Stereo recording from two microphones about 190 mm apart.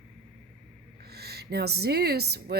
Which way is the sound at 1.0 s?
55° right (ahead or behind).